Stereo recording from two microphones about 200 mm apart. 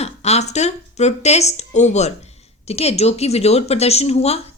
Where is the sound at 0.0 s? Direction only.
35° left (ahead or behind).